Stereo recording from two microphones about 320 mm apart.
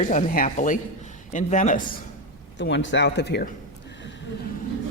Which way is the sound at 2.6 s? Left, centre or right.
Left.